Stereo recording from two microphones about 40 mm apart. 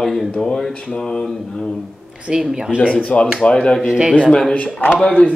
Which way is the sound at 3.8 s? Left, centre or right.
Right.